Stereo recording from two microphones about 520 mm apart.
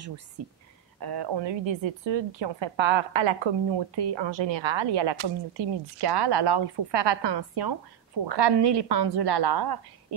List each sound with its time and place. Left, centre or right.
0.9 s a woman's voice: right